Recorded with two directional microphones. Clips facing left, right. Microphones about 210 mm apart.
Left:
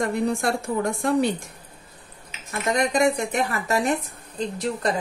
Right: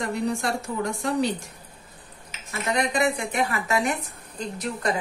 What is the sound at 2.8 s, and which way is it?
A woman's voice, 45° left (ahead or behind).